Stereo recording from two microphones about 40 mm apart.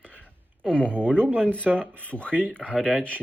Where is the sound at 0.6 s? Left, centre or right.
Left.